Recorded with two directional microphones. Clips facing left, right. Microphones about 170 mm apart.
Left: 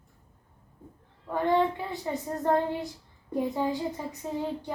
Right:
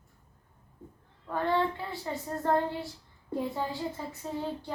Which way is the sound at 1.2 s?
15° left (ahead or behind).